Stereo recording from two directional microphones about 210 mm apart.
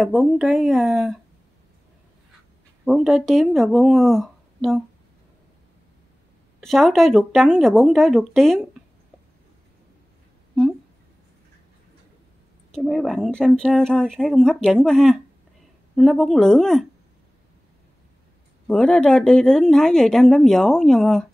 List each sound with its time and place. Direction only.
0.0 s speech: centre (ahead or behind)
2.8 s speech: centre (ahead or behind)
6.6 s speech: centre (ahead or behind)
12.7 s speech: centre (ahead or behind)
18.7 s speech: 5° left (ahead or behind)